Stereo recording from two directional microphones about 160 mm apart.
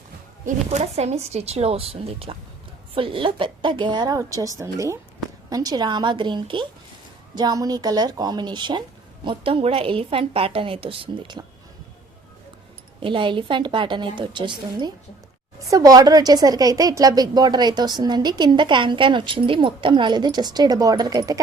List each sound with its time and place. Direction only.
0.4 s a woman's voice: 45° right (ahead or behind)
13.0 s a woman's voice: 30° right (ahead or behind)